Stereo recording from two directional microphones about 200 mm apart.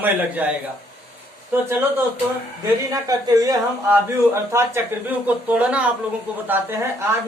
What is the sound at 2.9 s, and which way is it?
Speech, 20° right (ahead or behind).